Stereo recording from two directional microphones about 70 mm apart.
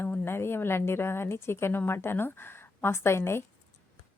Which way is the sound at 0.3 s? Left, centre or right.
Left.